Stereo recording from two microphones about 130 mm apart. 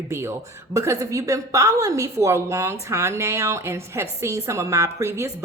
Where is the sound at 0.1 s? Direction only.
20° right (ahead or behind).